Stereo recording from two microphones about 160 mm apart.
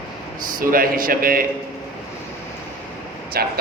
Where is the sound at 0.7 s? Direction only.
60° right (ahead or behind).